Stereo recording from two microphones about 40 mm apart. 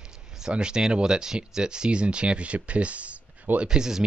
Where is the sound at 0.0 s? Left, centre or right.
Centre; by 3.4 s right.